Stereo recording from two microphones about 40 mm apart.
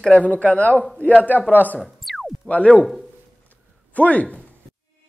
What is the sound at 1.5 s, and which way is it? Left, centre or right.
Speech, left.